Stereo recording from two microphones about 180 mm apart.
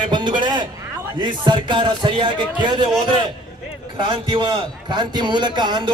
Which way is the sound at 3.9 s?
25° right (ahead or behind).